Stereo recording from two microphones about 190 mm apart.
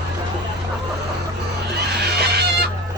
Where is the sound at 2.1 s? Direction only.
60° right (ahead or behind).